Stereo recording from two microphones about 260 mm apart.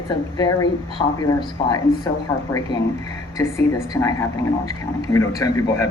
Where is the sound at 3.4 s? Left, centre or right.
Centre.